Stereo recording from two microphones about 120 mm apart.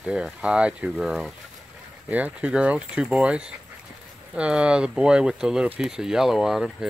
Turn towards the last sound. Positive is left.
turn(degrees=-5)  # may be behind; listen again after turning